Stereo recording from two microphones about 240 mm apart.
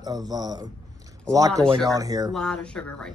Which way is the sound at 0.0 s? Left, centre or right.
Centre.